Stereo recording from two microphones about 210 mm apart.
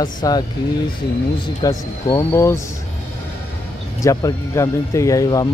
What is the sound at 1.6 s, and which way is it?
Speech, 20° left (ahead or behind).